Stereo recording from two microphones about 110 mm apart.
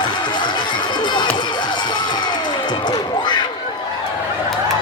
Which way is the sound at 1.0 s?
45° left (ahead or behind).